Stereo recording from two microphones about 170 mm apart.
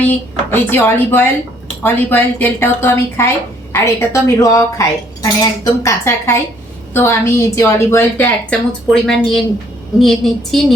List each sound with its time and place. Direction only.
0.1 s a woman's voice: 10° left (ahead or behind)